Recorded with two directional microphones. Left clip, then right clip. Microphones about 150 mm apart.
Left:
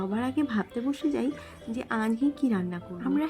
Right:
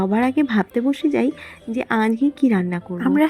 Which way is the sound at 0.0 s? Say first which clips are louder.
Right 10 dB; 40° right (ahead or behind).